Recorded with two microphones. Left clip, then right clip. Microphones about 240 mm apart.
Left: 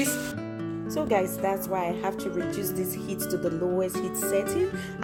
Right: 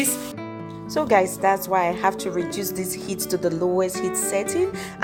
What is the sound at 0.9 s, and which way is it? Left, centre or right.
Speech, centre.